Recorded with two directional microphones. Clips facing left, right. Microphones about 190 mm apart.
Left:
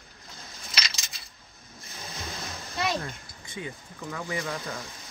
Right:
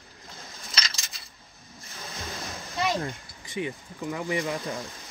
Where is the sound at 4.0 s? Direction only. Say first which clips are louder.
Right 4 dB; 15° right (ahead or behind).